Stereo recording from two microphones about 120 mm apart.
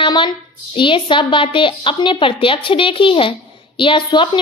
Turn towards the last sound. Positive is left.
turn(degrees=40)  # may be behind; listen again after turning